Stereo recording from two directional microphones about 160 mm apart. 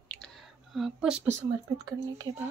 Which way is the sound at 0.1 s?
5° left (ahead or behind).